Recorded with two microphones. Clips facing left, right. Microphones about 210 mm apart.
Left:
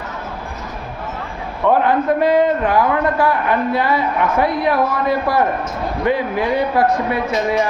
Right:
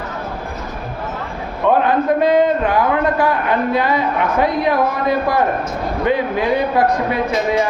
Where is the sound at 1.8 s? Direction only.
20° right (ahead or behind).